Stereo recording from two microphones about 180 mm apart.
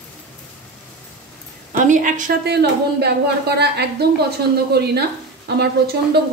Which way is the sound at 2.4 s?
65° right (ahead or behind).